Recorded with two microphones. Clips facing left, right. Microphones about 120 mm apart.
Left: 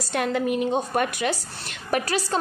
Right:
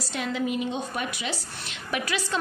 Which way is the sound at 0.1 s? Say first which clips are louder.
Left 5 dB; 55° left (ahead or behind).